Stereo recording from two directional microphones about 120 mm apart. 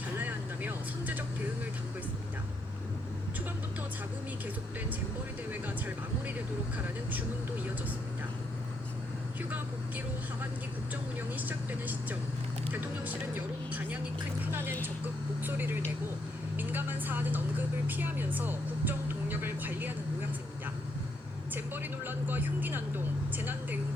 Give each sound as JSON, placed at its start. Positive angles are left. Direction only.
{"t": 0.2, "sound": "vehicle", "side_deg": -15}
{"t": 5.5, "sound": "vehicle", "side_deg": -15}
{"t": 11.3, "sound": "speech", "side_deg": -15}
{"t": 21.5, "sound": "speech", "side_deg": -15}